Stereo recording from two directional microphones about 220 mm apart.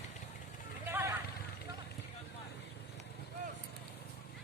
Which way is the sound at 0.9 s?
10° right (ahead or behind).